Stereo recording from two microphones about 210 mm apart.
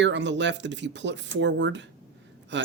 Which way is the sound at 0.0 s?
60° right (ahead or behind).